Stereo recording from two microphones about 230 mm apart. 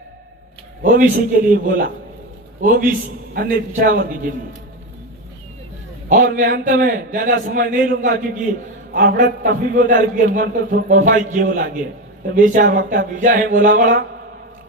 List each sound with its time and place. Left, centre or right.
0.8 s a man's voice: right
6.1 s a man's voice: right